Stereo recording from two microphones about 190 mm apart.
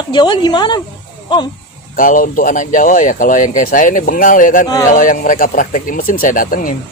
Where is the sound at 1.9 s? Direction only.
45° left (ahead or behind).